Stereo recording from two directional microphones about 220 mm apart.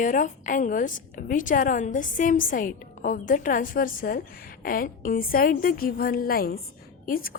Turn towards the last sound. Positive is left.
turn(degrees=40)  # may be behind; listen again after turning